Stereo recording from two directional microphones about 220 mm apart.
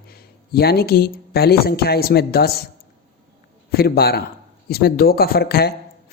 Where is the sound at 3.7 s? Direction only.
45° left (ahead or behind).